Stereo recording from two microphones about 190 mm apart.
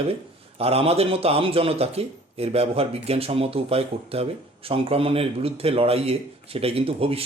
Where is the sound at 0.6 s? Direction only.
30° right (ahead or behind).